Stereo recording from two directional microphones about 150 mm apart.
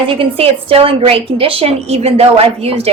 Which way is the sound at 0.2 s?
40° right (ahead or behind).